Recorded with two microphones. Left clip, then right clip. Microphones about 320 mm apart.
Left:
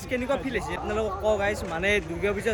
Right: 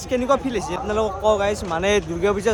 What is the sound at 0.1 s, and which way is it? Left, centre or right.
Speech, centre.